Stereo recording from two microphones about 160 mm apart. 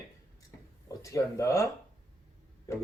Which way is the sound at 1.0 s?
20° left (ahead or behind).